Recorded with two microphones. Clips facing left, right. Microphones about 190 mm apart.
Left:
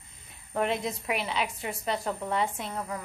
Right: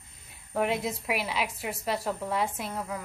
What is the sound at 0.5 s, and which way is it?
A woman's voice, 5° right (ahead or behind).